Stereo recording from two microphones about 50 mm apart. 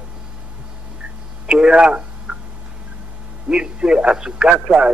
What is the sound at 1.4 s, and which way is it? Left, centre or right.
Speech, centre.